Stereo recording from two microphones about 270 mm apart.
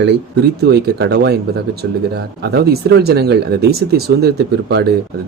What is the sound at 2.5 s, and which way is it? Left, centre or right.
Speech, right.